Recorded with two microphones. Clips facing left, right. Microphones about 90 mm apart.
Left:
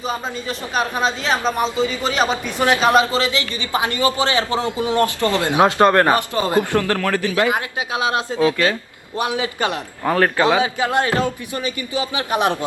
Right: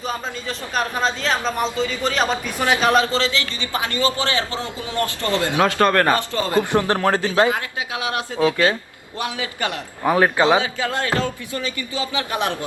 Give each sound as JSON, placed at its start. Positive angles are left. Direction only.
{"t": 0.1, "sound": "a man's voice", "side_deg": 10}
{"t": 6.7, "sound": "a man's voice", "side_deg": -20}
{"t": 9.3, "sound": "a man's voice", "side_deg": 20}
{"t": 10.0, "sound": "a man's voice", "side_deg": -10}
{"t": 10.6, "sound": "a man's voice", "side_deg": 20}